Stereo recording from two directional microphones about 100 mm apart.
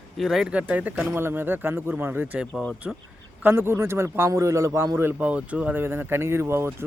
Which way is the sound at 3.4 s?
25° right (ahead or behind).